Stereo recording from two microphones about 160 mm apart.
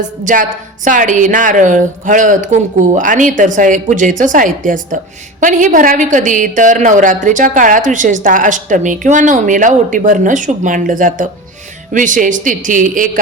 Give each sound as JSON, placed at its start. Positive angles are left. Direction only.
{"t": 0.3, "sound": "a woman's voice", "side_deg": -50}